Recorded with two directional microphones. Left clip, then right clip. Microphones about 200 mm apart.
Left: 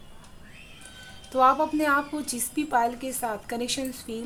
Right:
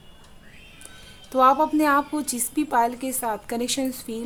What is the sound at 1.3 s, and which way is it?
A woman's voice, 30° right (ahead or behind).